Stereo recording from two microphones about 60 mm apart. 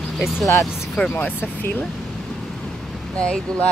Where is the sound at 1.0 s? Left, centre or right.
Centre.